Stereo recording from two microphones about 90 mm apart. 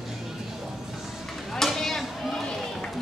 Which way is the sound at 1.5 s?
5° left (ahead or behind).